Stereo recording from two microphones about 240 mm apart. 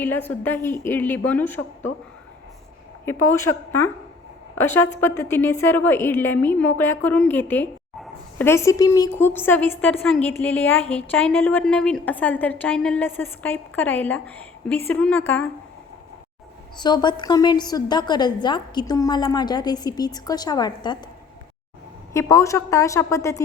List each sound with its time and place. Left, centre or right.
0.0 s a woman's voice: centre
3.1 s a woman's voice: centre
16.7 s a woman's voice: centre
22.1 s a woman's voice: centre